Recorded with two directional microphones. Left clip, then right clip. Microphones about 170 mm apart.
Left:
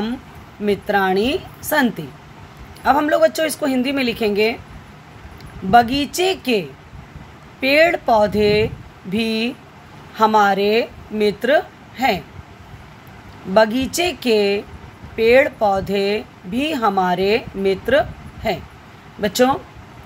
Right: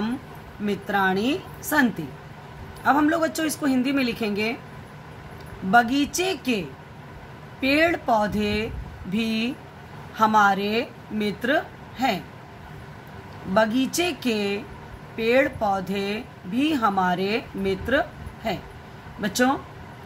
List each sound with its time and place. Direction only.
0.7 s speech: 35° left (ahead or behind)
5.7 s speech: 35° left (ahead or behind)
7.6 s a woman's voice: 35° left (ahead or behind)
13.5 s speech: 35° left (ahead or behind)